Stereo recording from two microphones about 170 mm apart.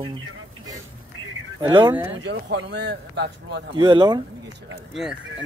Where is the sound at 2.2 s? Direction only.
90° right.